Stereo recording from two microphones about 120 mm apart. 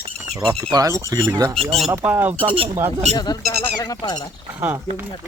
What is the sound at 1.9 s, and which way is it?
Speech, 15° right (ahead or behind).